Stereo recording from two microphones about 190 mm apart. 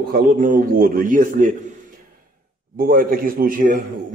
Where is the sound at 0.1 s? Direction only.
45° right (ahead or behind).